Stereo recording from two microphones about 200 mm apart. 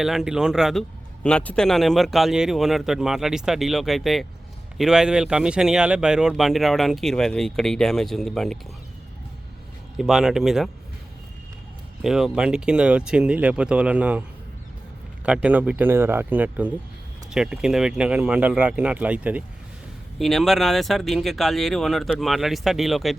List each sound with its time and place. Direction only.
0.0 s a man's voice: centre (ahead or behind)
10.0 s a man's voice: centre (ahead or behind)
12.0 s a man's voice: centre (ahead or behind)
15.3 s a man's voice: 5° right (ahead or behind)